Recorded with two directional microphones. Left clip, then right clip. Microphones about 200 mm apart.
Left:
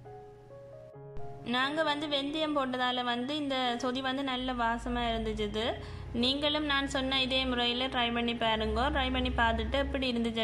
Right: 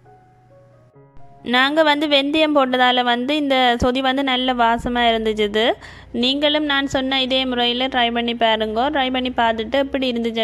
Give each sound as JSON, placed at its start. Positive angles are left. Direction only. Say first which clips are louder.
{"t": 1.4, "sound": "a woman's voice", "louder": "right 15 dB", "side_deg": -40}